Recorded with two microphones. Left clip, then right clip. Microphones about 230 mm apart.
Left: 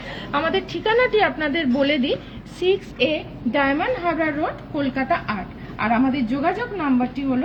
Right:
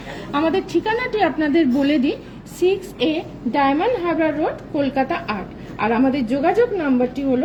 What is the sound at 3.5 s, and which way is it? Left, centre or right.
A woman's voice, left.